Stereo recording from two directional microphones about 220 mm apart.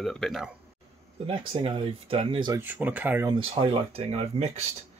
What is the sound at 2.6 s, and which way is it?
Speech, 10° right (ahead or behind).